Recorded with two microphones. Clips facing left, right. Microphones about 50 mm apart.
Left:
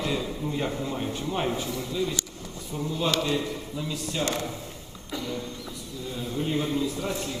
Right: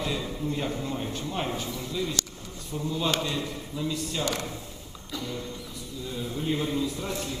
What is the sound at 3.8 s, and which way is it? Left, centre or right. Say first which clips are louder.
Speech: right 3 dB; centre.